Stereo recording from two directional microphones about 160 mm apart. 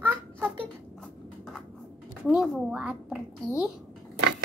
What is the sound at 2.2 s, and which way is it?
Speech, 5° right (ahead or behind).